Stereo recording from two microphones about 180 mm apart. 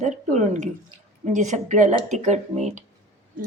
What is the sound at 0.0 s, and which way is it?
Speech, 40° right (ahead or behind).